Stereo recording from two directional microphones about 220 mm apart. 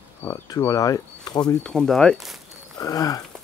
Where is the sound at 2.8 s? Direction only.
15° left (ahead or behind).